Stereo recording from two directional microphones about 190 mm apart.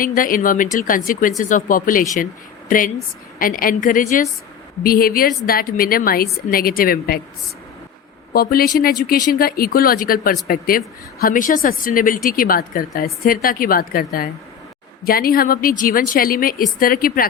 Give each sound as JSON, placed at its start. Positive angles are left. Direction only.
{"t": 0.0, "sound": "speech", "side_deg": 45}
{"t": 8.3, "sound": "speech", "side_deg": 50}